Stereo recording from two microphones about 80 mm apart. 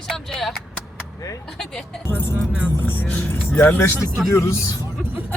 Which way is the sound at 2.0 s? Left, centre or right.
Left.